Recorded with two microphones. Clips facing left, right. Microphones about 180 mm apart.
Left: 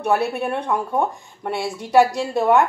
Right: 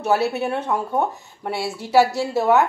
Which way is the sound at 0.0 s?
5° right (ahead or behind).